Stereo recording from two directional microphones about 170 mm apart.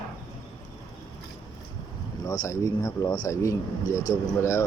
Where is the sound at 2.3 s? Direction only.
20° left (ahead or behind).